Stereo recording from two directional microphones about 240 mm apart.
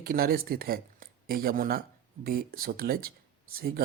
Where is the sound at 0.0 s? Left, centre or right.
Right.